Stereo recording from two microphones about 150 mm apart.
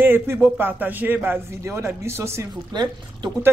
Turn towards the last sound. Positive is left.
turn(degrees=-30)  # may be behind; listen again after turning